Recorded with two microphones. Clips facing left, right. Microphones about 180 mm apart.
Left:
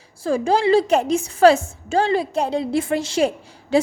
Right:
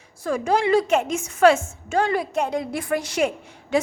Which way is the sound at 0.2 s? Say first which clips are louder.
Left 3 dB; 30° left (ahead or behind).